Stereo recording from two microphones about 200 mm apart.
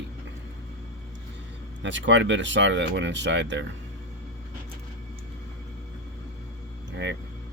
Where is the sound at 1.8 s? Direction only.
65° right (ahead or behind).